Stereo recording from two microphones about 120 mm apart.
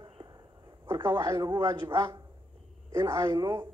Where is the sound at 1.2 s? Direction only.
25° right (ahead or behind).